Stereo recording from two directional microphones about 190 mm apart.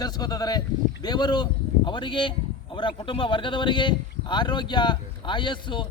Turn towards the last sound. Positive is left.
turn(degrees=25)  # may be behind; listen again after turning